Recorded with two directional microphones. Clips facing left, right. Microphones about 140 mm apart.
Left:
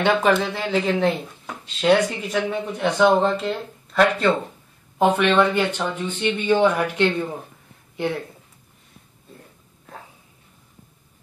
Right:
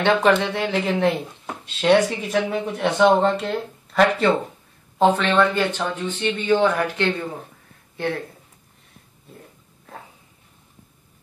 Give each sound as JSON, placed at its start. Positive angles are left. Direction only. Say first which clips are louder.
{"t": 0.0, "sound": "speech", "louder": "right 1 dB", "side_deg": 5}
{"t": 4.9, "sound": "speech", "louder": "even", "side_deg": 10}
{"t": 7.9, "sound": "a sound", "louder": "left 1 dB", "side_deg": 15}